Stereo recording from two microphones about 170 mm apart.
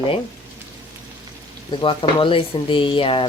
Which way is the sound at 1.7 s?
30° left (ahead or behind).